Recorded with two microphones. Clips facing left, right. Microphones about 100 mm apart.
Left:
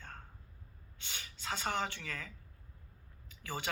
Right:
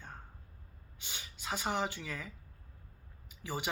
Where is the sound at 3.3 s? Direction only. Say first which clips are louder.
Right 2 dB; 15° right (ahead or behind).